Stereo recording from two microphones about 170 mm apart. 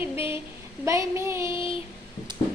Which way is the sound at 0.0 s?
15° right (ahead or behind).